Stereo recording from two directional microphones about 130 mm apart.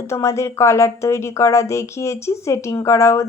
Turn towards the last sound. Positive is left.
turn(degrees=20)  # may be behind; listen again after turning